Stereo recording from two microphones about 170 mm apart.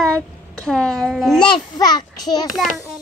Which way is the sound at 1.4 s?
25° left (ahead or behind).